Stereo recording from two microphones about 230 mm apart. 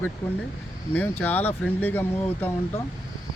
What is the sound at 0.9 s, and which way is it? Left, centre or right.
Speech, centre.